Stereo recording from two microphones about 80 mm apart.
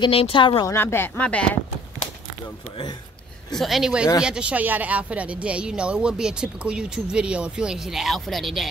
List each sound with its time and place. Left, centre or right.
0.0 s speech: left
0.7 s speech: left; by 1.6 s centre
3.5 s a woman's voice: centre